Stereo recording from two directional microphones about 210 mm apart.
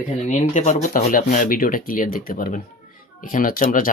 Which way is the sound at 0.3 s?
35° left (ahead or behind).